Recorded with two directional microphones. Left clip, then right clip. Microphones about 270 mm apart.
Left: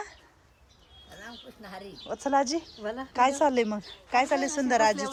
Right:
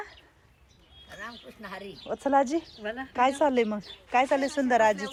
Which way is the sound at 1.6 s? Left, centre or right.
Centre.